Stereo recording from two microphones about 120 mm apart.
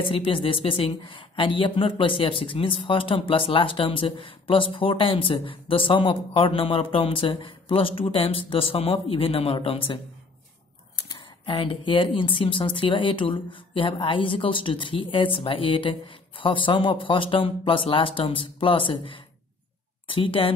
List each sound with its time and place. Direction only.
0.1 s a woman's voice: 50° left (ahead or behind)
11.1 s a woman's voice: 45° left (ahead or behind)